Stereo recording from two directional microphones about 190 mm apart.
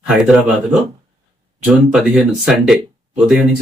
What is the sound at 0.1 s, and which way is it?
Speech, 5° right (ahead or behind).